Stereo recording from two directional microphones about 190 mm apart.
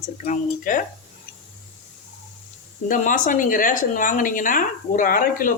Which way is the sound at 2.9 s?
45° left (ahead or behind).